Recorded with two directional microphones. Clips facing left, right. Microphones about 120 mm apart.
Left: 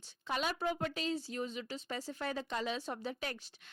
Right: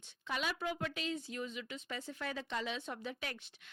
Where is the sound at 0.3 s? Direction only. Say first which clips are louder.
Left 3 dB; 35° left (ahead or behind).